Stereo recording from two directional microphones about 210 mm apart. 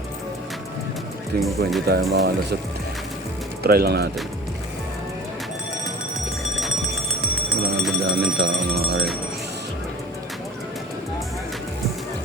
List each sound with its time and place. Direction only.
1.4 s speech: centre (ahead or behind)
1.9 s speech: 50° right (ahead or behind)
3.6 s speech: 45° right (ahead or behind)
8.0 s speech: 50° right (ahead or behind)